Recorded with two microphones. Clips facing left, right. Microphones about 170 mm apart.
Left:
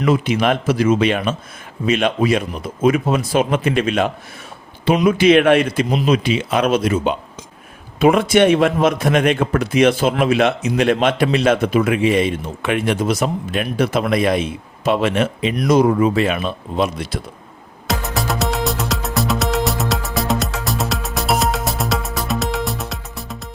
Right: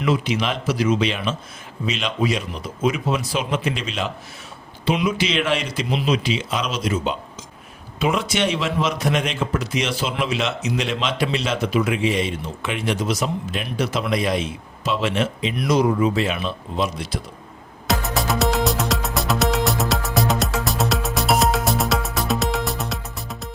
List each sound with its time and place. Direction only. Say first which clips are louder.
0.0 s a man's voice: left 5 dB; 50° left (ahead or behind)
17.8 s music: left 1 dB; centre (ahead or behind)